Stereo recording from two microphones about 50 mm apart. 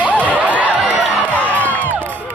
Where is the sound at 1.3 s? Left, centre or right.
Left.